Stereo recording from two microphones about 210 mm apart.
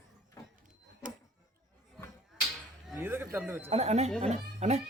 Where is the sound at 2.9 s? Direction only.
10° right (ahead or behind).